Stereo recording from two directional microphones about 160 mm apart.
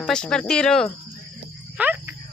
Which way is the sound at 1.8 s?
10° right (ahead or behind).